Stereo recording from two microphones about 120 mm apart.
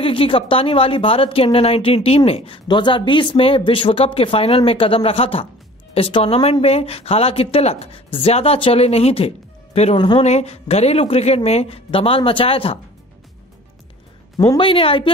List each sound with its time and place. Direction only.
0.0 s a woman's voice: 50° left (ahead or behind)
9.9 s a woman's voice: 40° left (ahead or behind)
10.2 s a woman's voice: 65° left (ahead or behind)
14.3 s a sound: 30° left (ahead or behind)
14.6 s speech: 50° left (ahead or behind)